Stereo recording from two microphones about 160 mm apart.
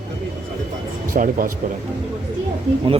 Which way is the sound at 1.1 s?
60° right (ahead or behind).